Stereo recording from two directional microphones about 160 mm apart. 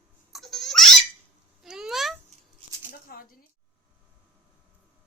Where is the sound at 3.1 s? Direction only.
65° left (ahead or behind).